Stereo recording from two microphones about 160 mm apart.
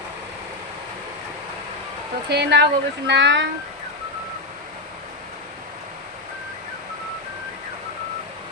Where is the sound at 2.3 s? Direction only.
90° right.